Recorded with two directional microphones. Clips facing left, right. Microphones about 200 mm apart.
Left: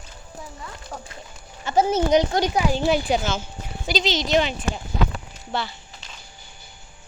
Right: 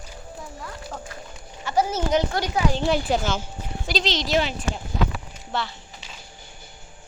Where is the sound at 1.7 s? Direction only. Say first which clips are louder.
Left 4 dB; 20° left (ahead or behind).